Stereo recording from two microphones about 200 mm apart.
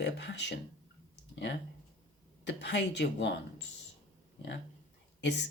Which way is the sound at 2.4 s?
60° left (ahead or behind).